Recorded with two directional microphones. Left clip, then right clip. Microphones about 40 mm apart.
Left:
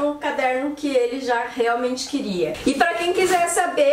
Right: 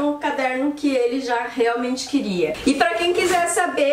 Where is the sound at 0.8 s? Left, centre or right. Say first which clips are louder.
Even; right.